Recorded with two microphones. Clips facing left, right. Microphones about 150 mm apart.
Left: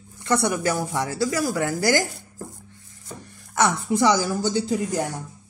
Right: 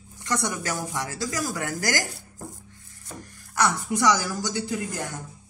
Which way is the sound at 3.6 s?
25° left (ahead or behind).